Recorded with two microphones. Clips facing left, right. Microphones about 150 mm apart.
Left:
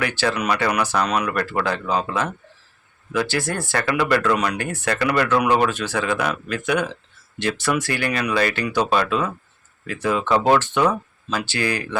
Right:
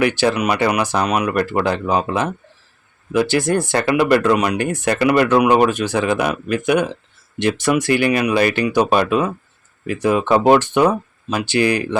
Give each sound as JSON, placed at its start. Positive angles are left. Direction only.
{"t": 0.0, "sound": "speech", "side_deg": -20}